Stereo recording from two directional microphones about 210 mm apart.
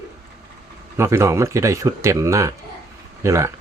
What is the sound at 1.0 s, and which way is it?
Speech, 15° right (ahead or behind).